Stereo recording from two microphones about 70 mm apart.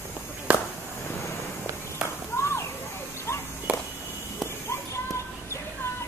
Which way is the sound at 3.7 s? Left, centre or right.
Centre.